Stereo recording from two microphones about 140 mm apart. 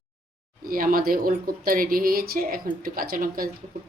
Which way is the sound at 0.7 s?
90° right.